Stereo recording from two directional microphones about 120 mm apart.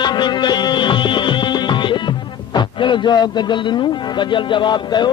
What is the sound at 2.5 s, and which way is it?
A man's voice, 40° left (ahead or behind).